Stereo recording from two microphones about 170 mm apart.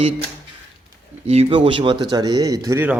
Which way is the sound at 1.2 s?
35° right (ahead or behind).